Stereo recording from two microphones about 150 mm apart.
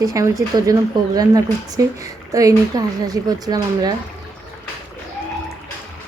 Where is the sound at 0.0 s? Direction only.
20° right (ahead or behind).